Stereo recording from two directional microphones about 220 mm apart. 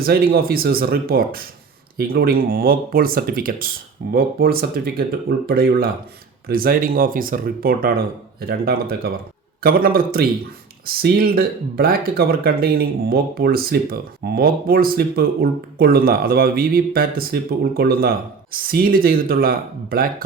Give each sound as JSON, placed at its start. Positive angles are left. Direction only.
{"t": 0.0, "sound": "speech", "side_deg": -45}